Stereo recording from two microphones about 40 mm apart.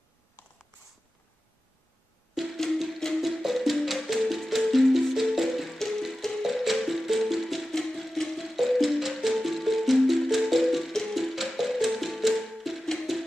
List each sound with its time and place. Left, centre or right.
0.4 s writing: left
2.5 s music: centre
3.2 s music: centre
5.8 s music: centre
6.4 s music: centre
10.9 s music: centre
11.1 s music: centre